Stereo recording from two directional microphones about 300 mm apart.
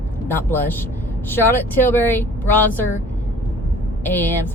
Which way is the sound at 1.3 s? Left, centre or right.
Centre.